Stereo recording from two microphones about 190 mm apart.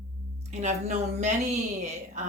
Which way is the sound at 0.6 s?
35° right (ahead or behind).